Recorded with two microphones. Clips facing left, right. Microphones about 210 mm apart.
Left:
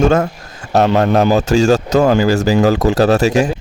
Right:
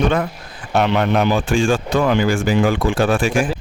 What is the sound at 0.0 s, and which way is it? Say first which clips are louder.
Speech: left 5 dB; 45° left (ahead or behind).